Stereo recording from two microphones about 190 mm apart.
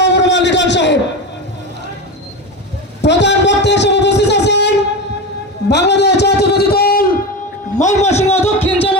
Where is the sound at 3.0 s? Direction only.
65° left (ahead or behind).